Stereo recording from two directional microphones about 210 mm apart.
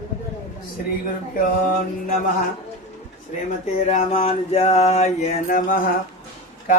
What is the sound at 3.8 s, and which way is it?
Mantra, 30° left (ahead or behind).